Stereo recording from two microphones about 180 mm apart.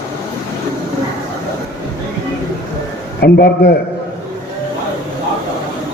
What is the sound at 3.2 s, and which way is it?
Speech, 60° left (ahead or behind).